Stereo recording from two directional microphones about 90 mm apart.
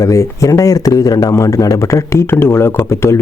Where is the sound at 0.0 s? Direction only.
35° left (ahead or behind).